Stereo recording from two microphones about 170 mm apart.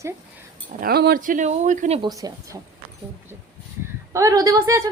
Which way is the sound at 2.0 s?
20° right (ahead or behind).